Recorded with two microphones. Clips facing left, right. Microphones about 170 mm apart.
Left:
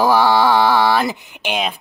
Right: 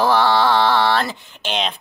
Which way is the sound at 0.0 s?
10° left (ahead or behind).